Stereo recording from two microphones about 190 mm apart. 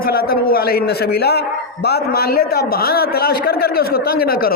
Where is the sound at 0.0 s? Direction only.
50° left (ahead or behind).